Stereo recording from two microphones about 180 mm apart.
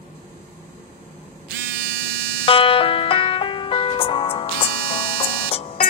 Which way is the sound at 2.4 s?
30° left (ahead or behind).